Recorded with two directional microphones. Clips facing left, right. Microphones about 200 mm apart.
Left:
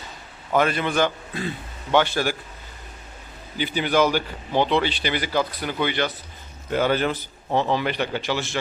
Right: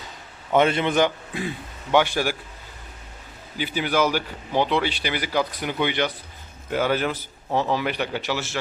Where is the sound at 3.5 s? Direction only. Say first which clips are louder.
Left 2 dB; 5° right (ahead or behind).